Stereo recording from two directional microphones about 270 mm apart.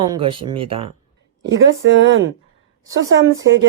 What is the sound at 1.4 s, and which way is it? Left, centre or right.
Speech, right.